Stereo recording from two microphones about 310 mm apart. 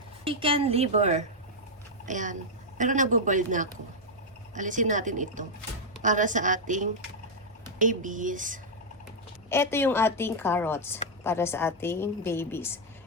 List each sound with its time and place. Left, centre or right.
0.3 s speech: centre
9.5 s a woman's voice: centre